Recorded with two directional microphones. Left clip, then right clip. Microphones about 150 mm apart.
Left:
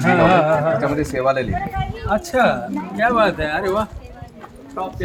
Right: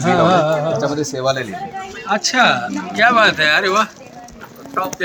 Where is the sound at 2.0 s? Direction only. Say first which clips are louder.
Right 3 dB; 70° left (ahead or behind).